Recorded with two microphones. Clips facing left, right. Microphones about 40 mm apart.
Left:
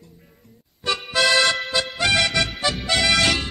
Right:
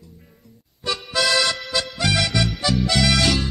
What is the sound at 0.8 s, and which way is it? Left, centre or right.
Music, left.